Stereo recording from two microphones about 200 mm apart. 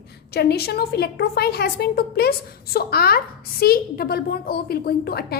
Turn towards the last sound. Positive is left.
turn(degrees=50)  # may be behind; listen again after turning